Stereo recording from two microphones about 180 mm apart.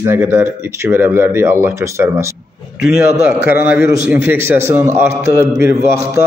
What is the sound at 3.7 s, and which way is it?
A man's voice, 10° right (ahead or behind).